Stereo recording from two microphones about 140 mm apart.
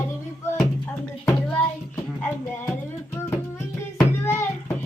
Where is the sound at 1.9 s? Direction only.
15° left (ahead or behind).